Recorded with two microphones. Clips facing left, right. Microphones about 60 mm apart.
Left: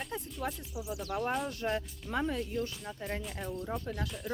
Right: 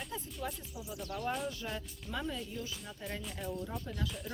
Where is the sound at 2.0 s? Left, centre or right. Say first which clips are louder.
Left 5 dB; left.